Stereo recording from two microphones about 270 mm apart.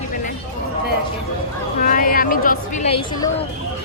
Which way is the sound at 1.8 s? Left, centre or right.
Left.